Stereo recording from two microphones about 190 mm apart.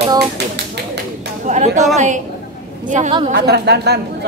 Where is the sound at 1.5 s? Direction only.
40° right (ahead or behind).